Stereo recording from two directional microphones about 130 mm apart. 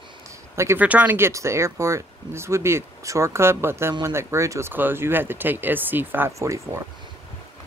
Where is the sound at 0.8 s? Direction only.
10° right (ahead or behind).